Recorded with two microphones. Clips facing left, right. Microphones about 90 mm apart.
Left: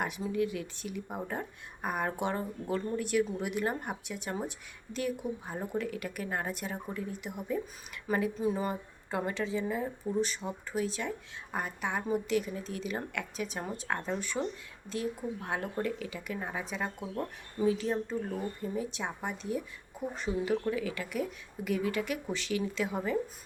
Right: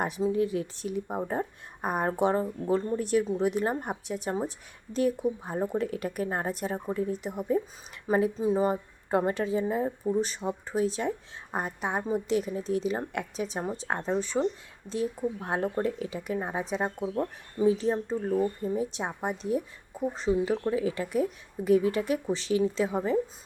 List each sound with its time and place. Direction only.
0.0 s speech: 30° right (ahead or behind)
15.4 s speech: 35° right (ahead or behind)
20.1 s speech: 30° right (ahead or behind)